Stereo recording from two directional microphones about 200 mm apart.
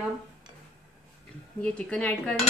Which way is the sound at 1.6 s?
5° left (ahead or behind).